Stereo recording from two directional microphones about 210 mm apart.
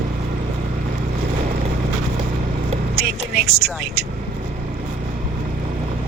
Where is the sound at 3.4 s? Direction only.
50° right (ahead or behind).